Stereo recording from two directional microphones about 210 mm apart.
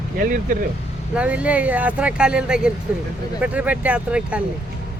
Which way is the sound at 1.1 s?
5° right (ahead or behind).